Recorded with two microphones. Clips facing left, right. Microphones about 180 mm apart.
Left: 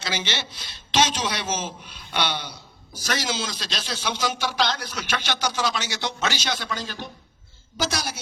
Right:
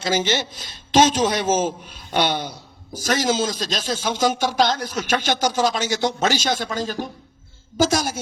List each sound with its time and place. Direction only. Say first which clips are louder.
0.0 s a man's voice: right 8 dB; 45° right (ahead or behind)